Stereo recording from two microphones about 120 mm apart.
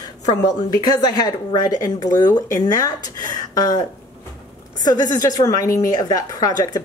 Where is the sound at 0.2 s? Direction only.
30° left (ahead or behind).